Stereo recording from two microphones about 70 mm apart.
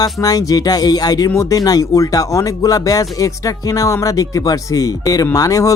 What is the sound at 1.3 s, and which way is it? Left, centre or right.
Speech, left.